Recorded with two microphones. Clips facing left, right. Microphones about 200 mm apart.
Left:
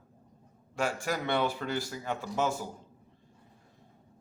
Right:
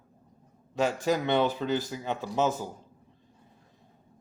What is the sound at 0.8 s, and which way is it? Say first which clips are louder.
A man's voice: right 5 dB; 20° right (ahead or behind).